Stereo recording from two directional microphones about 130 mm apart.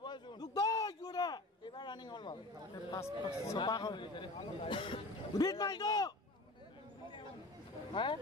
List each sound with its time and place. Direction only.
0.0 s a sound: 35° left (ahead or behind)
2.9 s speech: 20° left (ahead or behind)
3.5 s a man's voice: 35° left (ahead or behind)
7.9 s speech: 40° left (ahead or behind)